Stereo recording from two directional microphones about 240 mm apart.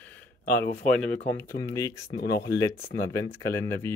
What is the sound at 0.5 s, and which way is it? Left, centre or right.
Speech, centre.